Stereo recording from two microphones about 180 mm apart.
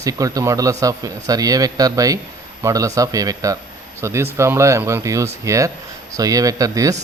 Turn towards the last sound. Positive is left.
turn(degrees=-20)  # may be behind; listen again after turning